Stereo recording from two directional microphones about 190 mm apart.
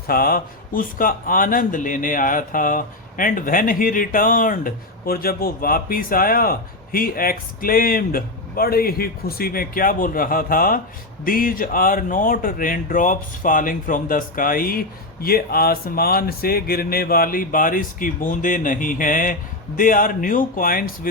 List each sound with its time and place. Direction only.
0.1 s speech: 50° left (ahead or behind)